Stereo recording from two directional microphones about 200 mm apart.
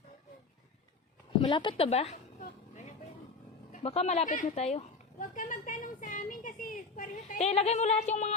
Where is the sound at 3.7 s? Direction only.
30° left (ahead or behind).